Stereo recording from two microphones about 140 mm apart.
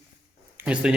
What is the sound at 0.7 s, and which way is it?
Speech, 5° right (ahead or behind).